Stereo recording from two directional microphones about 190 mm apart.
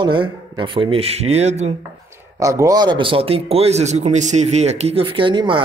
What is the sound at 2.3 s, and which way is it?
Speech, 15° right (ahead or behind).